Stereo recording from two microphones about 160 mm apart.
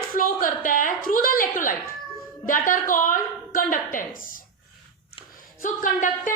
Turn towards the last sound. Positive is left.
turn(degrees=55)  # may be behind; listen again after turning